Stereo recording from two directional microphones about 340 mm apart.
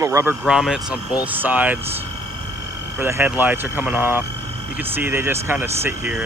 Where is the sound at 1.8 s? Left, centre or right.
Centre.